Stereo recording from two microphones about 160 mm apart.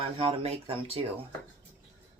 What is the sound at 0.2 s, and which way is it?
Speech, 40° right (ahead or behind).